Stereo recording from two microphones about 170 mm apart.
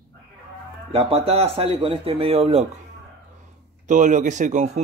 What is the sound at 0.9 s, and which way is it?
A man's voice, 35° right (ahead or behind).